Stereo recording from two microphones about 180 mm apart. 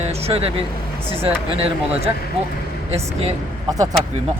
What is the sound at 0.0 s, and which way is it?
Speech, 35° right (ahead or behind).